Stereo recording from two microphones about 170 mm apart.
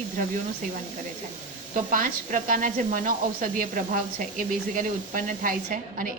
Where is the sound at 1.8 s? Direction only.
55° right (ahead or behind).